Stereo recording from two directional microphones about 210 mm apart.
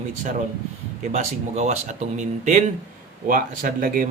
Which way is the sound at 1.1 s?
35° right (ahead or behind).